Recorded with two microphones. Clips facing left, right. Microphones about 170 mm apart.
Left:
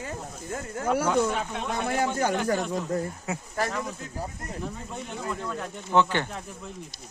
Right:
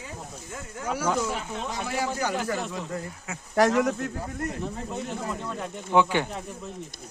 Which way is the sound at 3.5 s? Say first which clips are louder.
Right 11 dB; 85° right.